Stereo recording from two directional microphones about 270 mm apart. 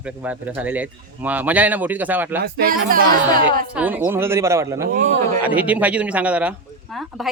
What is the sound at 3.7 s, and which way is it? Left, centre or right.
Speech, centre.